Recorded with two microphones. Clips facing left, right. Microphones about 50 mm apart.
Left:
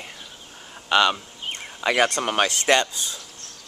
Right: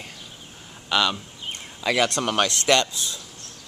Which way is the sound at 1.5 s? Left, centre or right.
Left.